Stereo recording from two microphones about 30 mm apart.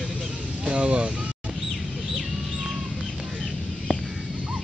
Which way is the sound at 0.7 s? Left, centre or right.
Right.